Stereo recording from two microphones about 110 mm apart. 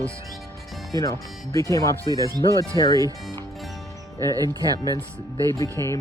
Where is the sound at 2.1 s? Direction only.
35° right (ahead or behind).